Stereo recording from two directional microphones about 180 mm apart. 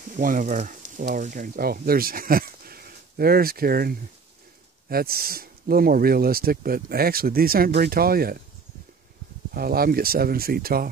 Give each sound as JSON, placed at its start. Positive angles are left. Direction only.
{"t": 0.0, "sound": "speech", "side_deg": -50}
{"t": 9.5, "sound": "speech", "side_deg": -55}